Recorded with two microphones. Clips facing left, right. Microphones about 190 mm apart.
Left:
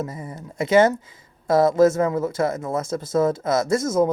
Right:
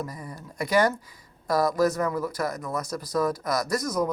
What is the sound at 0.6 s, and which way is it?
Speech, 25° left (ahead or behind).